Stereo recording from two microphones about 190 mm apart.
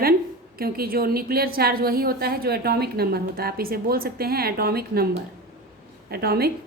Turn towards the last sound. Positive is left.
turn(degrees=-55)  # may be behind; listen again after turning